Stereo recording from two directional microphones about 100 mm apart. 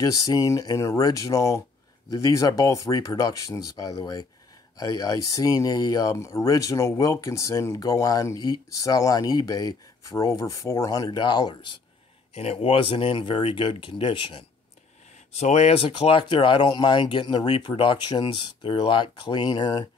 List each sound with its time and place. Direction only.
0.0 s speech: 35° left (ahead or behind)
12.4 s speech: 90° left; by 14.4 s 55° left (ahead or behind)
15.5 s speech: 85° left; by 19.9 s 40° left (ahead or behind)